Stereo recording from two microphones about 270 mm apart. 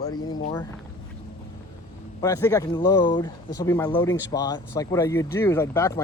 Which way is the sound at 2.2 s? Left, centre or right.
Centre.